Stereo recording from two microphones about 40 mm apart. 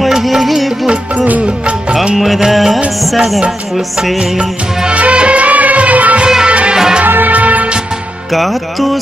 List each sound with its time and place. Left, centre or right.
0.2 s music: centre
1.1 s music: right
2.1 s music: centre
4.2 s music: right
6.2 s music: right
7.1 s music: right
7.3 s music: right
8.3 s music: centre